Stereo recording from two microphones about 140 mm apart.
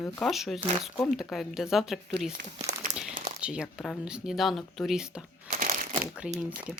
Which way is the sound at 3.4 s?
5° right (ahead or behind).